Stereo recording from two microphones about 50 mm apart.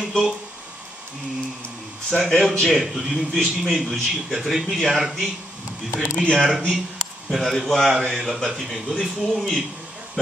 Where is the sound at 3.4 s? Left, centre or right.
Centre.